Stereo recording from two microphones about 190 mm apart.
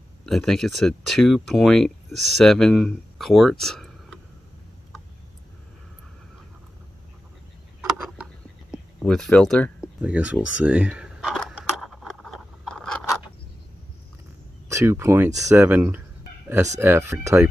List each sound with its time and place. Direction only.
0.2 s speech: centre (ahead or behind)
8.7 s speech: 5° left (ahead or behind)
10.6 s a sound: 5° right (ahead or behind)
14.7 s speech: 15° right (ahead or behind)